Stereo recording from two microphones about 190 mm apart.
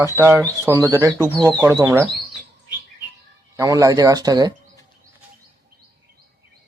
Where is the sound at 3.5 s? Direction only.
15° right (ahead or behind).